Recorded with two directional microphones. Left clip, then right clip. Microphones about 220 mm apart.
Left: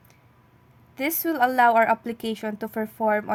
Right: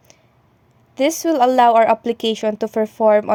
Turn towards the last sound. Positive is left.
turn(degrees=-30)  # may be behind; listen again after turning